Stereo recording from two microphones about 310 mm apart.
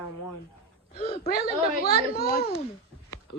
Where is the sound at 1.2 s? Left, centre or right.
Left.